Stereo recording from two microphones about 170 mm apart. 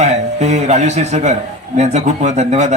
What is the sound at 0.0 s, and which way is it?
A man's voice, 40° right (ahead or behind).